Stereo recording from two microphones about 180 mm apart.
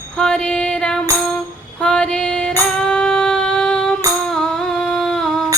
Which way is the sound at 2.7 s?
5° left (ahead or behind).